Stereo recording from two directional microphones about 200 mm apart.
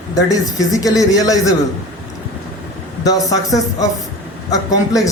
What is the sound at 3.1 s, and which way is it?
Speech, 15° left (ahead or behind).